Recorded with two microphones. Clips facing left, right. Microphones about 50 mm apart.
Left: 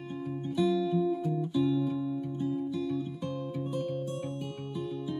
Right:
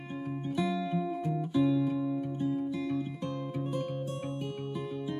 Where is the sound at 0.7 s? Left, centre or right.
Right.